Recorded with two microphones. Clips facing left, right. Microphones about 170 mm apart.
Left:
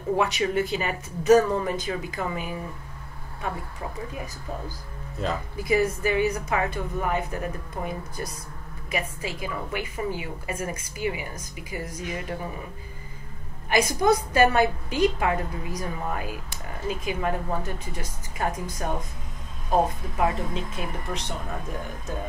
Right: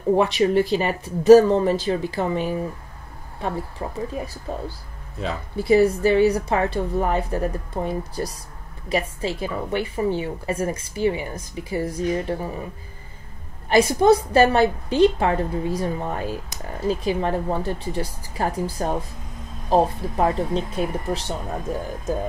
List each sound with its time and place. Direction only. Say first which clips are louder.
0.1 s a woman's voice: right 6 dB; 35° right (ahead or behind)
4.2 s a woman's voice: right 6 dB; 35° right (ahead or behind)
5.6 s a woman's voice: right 7 dB; 35° right (ahead or behind)
13.7 s a woman's voice: right 6 dB; 30° right (ahead or behind)